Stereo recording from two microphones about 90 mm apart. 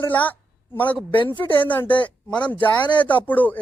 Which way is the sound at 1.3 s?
65° left (ahead or behind).